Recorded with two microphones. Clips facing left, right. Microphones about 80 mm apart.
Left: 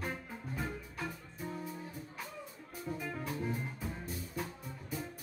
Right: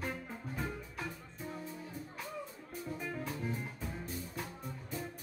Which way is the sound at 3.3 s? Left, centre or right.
Centre.